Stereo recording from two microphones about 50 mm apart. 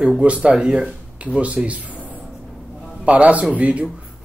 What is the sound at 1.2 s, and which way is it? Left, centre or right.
Speech, right.